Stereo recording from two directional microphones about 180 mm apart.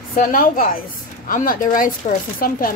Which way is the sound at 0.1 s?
50° left (ahead or behind).